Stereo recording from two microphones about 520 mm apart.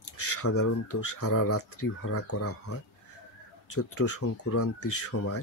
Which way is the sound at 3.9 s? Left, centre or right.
Left.